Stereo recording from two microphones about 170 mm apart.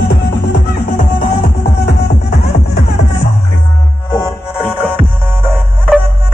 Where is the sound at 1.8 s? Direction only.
70° left (ahead or behind).